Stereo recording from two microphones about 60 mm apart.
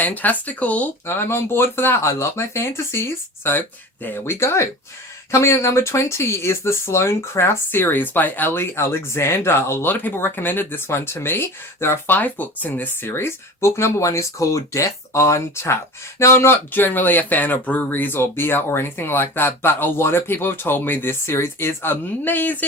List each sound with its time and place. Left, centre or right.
0.0 s speech: left
1.0 s speech: left
2.0 s speech: left
3.6 s speech: left
9.9 s speech: left
12.1 s speech: left
13.1 s speech: left